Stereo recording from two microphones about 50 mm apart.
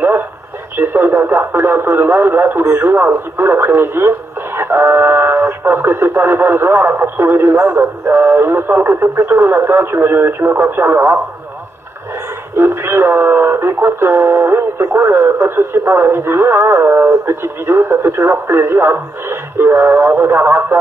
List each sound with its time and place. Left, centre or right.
0.7 s speech: right
2.9 s speech: right
4.6 s music: right
5.6 s speech: right
12.5 s speech: right